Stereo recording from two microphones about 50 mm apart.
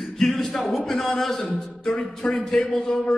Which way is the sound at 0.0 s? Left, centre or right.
Centre.